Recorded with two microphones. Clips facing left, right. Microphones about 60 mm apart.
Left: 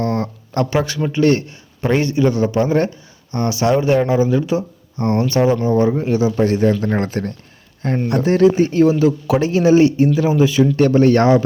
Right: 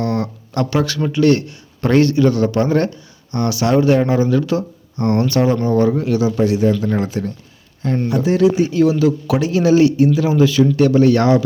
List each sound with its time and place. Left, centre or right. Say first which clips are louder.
0.0 s a sound: even; left
1.1 s a man's voice: right 1 dB; left
6.4 s a man's voice: even; left
10.8 s speech: left 1 dB; left